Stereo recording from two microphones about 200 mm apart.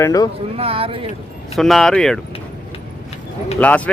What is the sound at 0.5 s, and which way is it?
Speech, 30° right (ahead or behind).